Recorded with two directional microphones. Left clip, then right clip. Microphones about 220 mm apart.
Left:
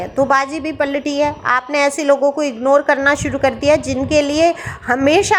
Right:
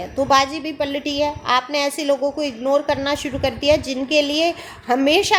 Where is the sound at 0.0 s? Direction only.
20° left (ahead or behind).